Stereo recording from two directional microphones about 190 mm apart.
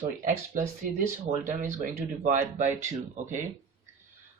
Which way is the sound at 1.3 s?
40° right (ahead or behind).